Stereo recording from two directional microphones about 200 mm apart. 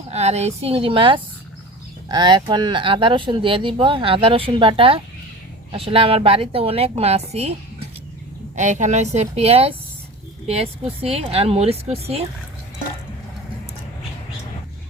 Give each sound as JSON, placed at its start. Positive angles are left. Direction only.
{"t": 0.1, "sound": "speech", "side_deg": -35}
{"t": 8.5, "sound": "a woman's voice", "side_deg": -35}